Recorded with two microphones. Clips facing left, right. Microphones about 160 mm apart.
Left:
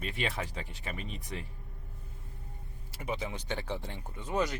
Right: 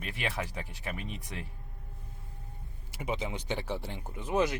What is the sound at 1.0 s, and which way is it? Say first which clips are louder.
Speech: even; 65° right (ahead or behind).